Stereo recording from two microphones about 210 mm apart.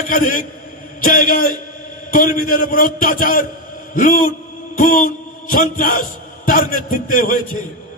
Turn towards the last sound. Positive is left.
turn(degrees=40)  # may be behind; listen again after turning